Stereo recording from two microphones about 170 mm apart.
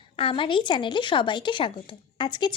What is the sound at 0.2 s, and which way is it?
Speech, 30° left (ahead or behind).